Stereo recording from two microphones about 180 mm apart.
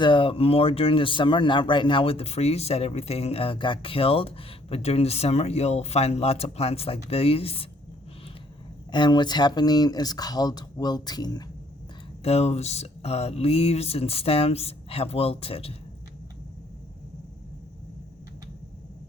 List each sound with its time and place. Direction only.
0.0 s speech: 30° left (ahead or behind)
8.9 s speech: 25° left (ahead or behind)
12.2 s speech: 35° left (ahead or behind)